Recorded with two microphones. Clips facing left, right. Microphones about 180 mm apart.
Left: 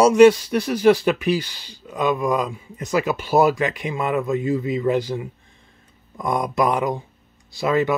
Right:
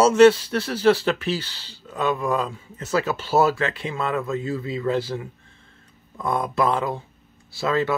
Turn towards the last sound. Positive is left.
turn(degrees=15)  # may be behind; listen again after turning